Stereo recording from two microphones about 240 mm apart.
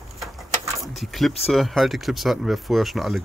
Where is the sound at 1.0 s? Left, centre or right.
Centre.